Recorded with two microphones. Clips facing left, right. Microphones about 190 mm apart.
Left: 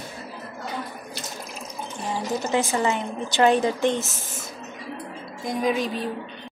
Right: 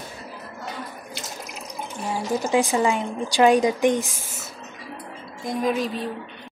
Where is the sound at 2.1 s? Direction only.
10° right (ahead or behind).